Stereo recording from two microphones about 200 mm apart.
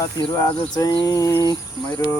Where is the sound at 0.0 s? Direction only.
20° left (ahead or behind).